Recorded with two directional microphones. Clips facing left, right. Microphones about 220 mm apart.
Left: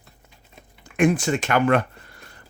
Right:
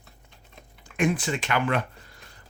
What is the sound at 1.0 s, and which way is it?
Speech, 45° left (ahead or behind).